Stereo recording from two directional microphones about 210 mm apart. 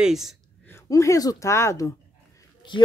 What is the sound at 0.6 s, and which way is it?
Speech, 15° left (ahead or behind).